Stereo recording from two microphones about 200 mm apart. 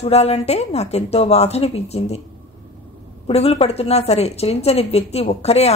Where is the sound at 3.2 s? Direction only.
30° left (ahead or behind).